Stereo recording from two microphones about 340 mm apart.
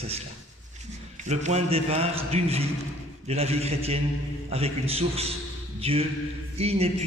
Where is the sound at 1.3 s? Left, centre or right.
Centre.